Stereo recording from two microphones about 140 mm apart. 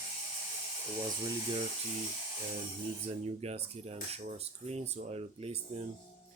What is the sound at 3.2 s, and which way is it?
Speech, 50° right (ahead or behind).